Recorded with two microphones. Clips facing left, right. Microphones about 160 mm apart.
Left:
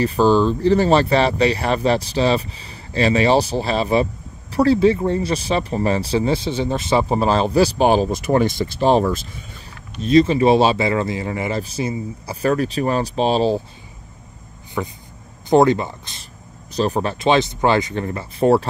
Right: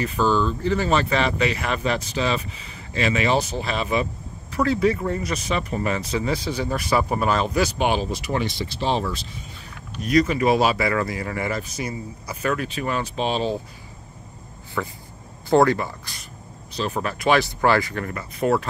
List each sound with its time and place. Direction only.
0.0 s speech: 35° left (ahead or behind)
10.0 s speech: 25° left (ahead or behind)
14.8 s speech: 20° left (ahead or behind)
16.7 s speech: 35° left (ahead or behind)